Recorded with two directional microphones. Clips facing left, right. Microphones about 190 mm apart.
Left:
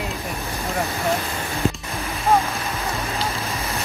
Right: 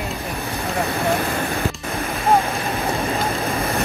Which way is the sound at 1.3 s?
55° right (ahead or behind).